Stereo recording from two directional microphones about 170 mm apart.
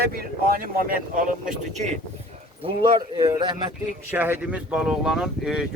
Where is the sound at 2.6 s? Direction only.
30° right (ahead or behind).